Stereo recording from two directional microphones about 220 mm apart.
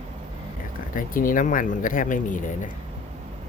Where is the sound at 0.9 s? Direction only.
40° left (ahead or behind).